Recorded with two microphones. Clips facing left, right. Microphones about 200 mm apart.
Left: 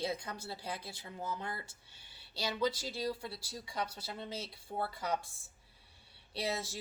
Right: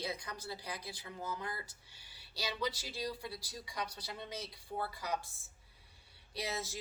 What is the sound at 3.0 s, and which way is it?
A woman's voice, 25° left (ahead or behind).